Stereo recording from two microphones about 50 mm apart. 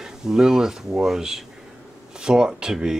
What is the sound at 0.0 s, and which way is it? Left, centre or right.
Speech, centre.